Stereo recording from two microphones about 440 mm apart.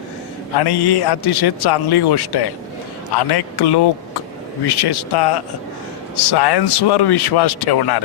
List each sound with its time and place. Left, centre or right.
0.6 s a man's voice: left